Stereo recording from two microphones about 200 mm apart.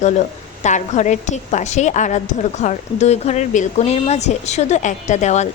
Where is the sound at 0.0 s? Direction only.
35° left (ahead or behind).